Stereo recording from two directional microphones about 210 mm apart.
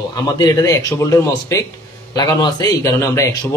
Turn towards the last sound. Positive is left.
turn(degrees=15)  # may be behind; listen again after turning